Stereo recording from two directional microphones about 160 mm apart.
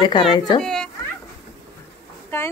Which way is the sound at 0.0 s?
30° left (ahead or behind).